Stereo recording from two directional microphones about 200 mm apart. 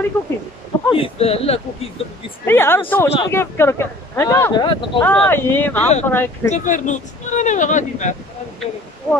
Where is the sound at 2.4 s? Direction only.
10° left (ahead or behind).